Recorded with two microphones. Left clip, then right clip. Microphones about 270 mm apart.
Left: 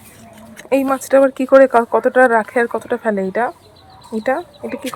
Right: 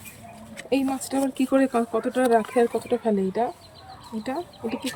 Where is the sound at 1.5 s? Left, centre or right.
Centre.